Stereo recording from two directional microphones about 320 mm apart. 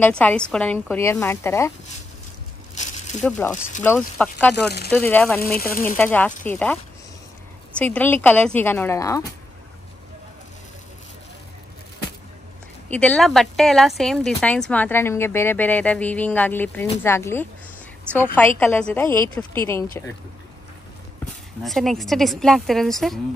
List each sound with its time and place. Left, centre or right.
0.0 s a woman's voice: centre
2.7 s a sound: left
3.2 s a woman's voice: centre
5.6 s speech: left
5.9 s a woman's voice: centre
12.9 s a woman's voice: centre
21.6 s a woman's voice: centre